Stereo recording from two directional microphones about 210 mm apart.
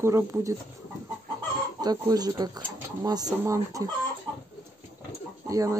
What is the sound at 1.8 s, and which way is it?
Speech, 20° right (ahead or behind).